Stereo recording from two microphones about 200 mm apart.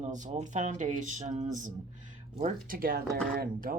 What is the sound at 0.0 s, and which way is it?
Speech, 40° right (ahead or behind).